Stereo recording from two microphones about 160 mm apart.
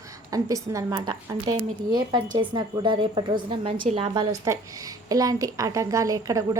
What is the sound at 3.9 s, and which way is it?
Speech, 45° right (ahead or behind).